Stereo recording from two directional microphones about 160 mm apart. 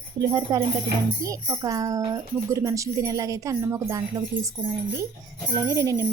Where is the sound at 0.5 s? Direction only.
20° right (ahead or behind).